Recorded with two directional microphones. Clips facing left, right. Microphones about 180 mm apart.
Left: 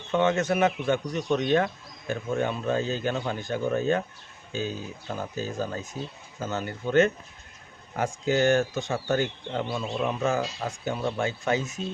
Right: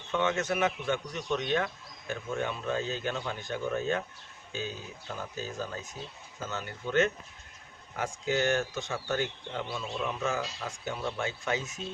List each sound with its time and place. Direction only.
0.1 s speech: 40° left (ahead or behind)